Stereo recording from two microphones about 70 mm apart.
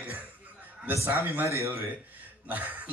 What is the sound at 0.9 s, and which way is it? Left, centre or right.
Speech, right.